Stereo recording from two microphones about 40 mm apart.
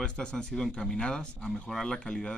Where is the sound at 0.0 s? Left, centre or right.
Left.